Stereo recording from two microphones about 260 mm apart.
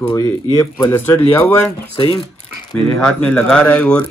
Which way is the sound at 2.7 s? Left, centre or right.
Centre.